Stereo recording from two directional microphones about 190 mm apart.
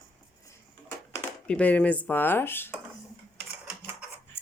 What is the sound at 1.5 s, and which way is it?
Speech, 5° left (ahead or behind).